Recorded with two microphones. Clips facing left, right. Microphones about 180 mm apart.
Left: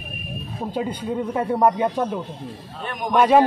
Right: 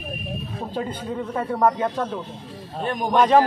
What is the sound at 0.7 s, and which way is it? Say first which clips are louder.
A man's voice: left 3 dB; 10° left (ahead or behind).